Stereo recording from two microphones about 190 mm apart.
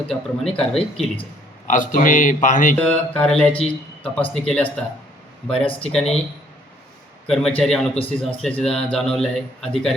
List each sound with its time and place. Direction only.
0.1 s a man's voice: centre (ahead or behind)
1.6 s a man's voice: 45° left (ahead or behind)
2.8 s a man's voice: 5° left (ahead or behind)
5.8 s a man's voice: centre (ahead or behind)
7.3 s a man's voice: 5° left (ahead or behind)